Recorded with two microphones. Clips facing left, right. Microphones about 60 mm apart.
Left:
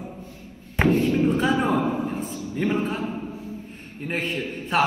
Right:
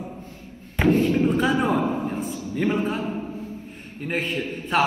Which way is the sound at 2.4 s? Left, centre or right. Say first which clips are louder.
Right 1 dB; right.